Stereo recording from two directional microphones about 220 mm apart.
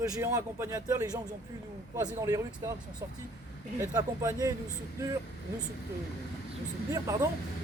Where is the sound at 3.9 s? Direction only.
15° right (ahead or behind).